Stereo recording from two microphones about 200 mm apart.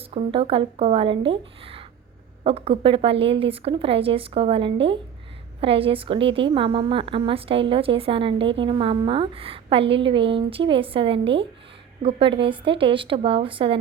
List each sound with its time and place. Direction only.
0.1 s a woman's voice: 30° right (ahead or behind)